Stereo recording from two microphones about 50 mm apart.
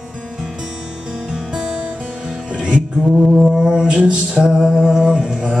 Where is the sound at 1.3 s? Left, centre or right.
Centre.